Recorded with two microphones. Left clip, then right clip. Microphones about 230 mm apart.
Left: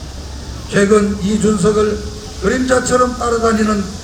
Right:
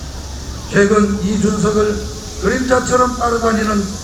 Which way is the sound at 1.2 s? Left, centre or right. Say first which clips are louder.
Left 2 dB; left.